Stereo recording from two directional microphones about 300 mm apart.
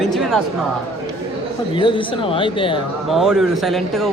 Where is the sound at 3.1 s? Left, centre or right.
Centre.